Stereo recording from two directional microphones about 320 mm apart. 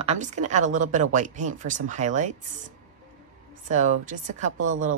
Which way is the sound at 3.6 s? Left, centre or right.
Right.